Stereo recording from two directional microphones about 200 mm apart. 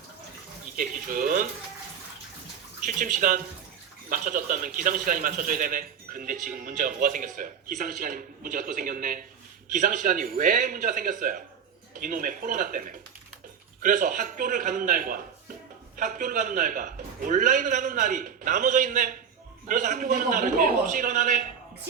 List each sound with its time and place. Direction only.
0.8 s a man's voice: 45° right (ahead or behind)
2.8 s a man's voice: 40° right (ahead or behind)